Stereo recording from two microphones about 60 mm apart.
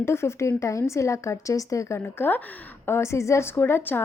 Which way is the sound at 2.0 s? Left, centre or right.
Left.